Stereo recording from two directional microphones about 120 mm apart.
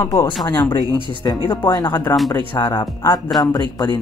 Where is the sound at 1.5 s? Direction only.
40° left (ahead or behind).